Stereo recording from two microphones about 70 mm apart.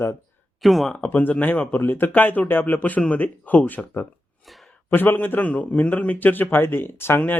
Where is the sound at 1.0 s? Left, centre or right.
Left.